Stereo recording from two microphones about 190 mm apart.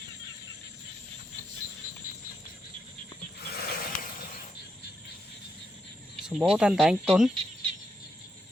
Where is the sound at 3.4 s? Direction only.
55° left (ahead or behind).